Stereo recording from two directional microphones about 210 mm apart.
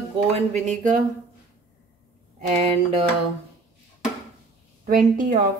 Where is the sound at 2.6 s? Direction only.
30° right (ahead or behind).